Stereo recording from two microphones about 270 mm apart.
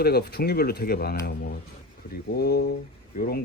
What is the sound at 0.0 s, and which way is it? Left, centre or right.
Speech, left.